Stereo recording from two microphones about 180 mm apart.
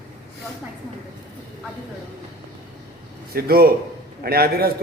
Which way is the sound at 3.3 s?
55° right (ahead or behind).